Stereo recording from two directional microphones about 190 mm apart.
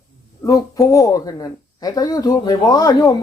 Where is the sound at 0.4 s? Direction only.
20° left (ahead or behind).